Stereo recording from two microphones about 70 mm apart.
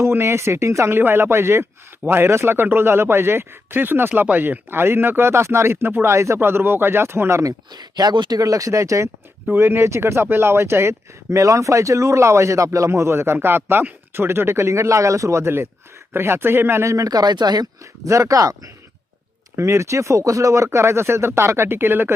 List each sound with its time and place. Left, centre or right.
0.0 s speech: right
0.9 s speech: right
7.7 s speech: right
9.5 s speech: right
18.0 s speech: right
19.5 s speech: right